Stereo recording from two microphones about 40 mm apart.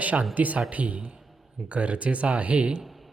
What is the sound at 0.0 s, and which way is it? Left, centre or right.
Speech, right.